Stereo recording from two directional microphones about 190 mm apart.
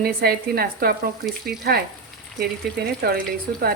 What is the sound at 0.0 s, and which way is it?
A woman's voice, 55° right (ahead or behind).